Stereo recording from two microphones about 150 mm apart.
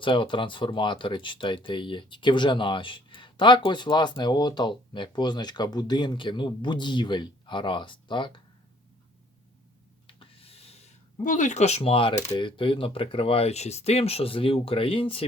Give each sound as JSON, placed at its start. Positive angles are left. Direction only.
{"t": 0.0, "sound": "speech", "side_deg": 35}
{"t": 10.2, "sound": "speech", "side_deg": 40}